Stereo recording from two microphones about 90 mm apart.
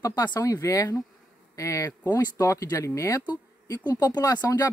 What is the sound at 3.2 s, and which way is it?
Speech, 50° left (ahead or behind).